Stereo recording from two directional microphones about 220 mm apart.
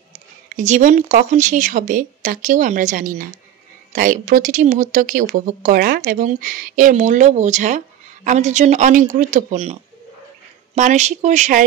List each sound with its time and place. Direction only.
0.1 s speech: 35° right (ahead or behind)